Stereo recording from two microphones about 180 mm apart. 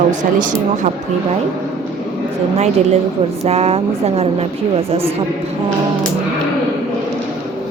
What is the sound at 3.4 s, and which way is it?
A woman's voice, 35° right (ahead or behind).